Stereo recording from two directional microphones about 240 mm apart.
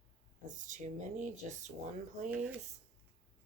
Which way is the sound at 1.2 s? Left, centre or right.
Right.